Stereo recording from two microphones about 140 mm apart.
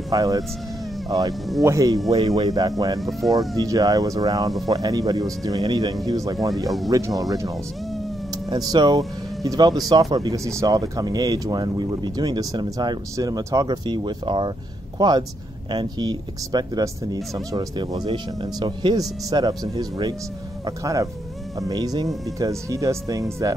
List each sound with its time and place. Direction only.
0.1 s speech: 25° right (ahead or behind)
1.6 s speech: 25° right (ahead or behind)
3.0 s speech: centre (ahead or behind)
3.5 s speech: 25° right (ahead or behind)